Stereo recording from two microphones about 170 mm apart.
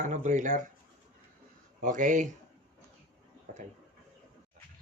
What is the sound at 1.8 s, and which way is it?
Speech, 50° right (ahead or behind).